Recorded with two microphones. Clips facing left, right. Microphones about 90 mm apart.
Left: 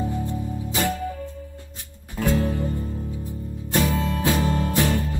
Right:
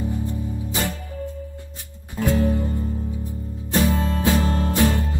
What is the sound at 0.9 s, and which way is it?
Music, 40° left (ahead or behind).